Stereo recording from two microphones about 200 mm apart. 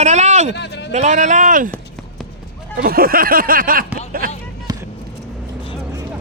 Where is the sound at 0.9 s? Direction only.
35° right (ahead or behind).